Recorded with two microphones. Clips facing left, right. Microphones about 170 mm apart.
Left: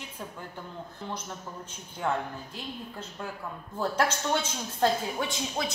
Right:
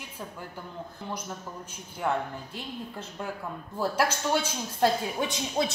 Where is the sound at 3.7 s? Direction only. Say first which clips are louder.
Right 1 dB; 10° right (ahead or behind).